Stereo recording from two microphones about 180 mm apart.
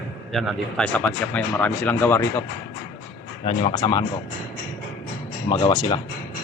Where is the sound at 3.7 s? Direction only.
25° left (ahead or behind).